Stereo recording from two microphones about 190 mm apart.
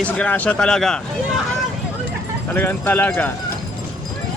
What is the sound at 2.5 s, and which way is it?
Speech, 10° left (ahead or behind).